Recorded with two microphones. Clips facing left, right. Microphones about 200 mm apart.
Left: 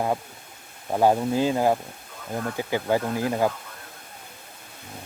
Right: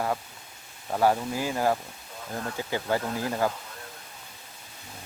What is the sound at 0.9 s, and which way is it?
Speech, 20° left (ahead or behind).